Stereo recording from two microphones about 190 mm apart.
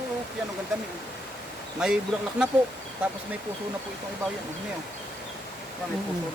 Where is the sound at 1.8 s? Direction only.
5° right (ahead or behind).